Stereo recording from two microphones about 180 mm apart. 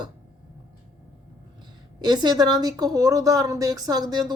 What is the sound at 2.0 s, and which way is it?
A woman's voice, 25° right (ahead or behind).